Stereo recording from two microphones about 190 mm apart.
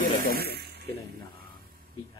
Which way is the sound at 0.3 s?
55° right (ahead or behind).